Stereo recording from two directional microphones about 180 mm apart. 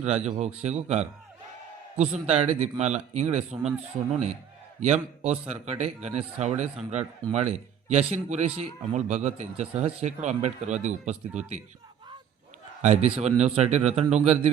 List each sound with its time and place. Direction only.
0.0 s a man's voice: 40° right (ahead or behind)
12.8 s a man's voice: 40° right (ahead or behind)